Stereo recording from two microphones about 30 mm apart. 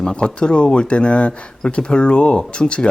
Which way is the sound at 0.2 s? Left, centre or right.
Left.